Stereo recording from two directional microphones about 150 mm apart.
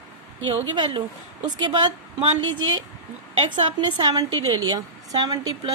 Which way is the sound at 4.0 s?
25° right (ahead or behind).